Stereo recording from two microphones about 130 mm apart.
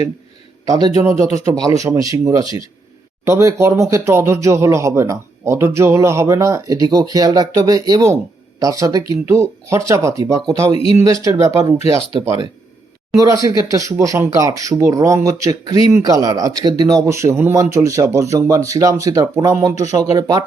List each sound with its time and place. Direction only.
0.6 s a man's voice: 25° right (ahead or behind)
10.8 s speech: 45° left (ahead or behind)
11.0 s speech: 25° right (ahead or behind)
13.1 s speech: 25° right (ahead or behind)